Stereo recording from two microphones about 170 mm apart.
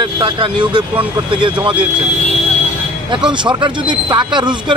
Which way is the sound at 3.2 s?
25° right (ahead or behind).